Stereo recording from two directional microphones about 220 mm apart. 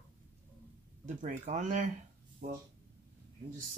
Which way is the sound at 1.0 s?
35° right (ahead or behind).